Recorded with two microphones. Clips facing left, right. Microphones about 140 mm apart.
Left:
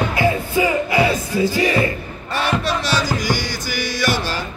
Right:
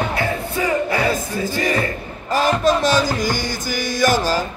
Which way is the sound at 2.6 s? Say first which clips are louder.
Right 5 dB; 45° right (ahead or behind).